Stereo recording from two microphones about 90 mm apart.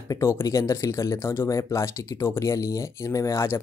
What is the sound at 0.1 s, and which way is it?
Speech, 30° left (ahead or behind).